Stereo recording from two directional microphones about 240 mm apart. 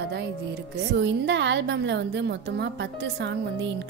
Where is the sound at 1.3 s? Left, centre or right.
Right.